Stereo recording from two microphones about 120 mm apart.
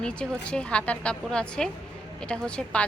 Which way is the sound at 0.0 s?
10° left (ahead or behind).